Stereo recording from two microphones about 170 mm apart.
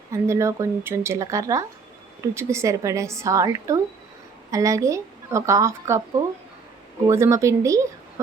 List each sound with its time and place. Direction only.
0.1 s speech: 15° right (ahead or behind)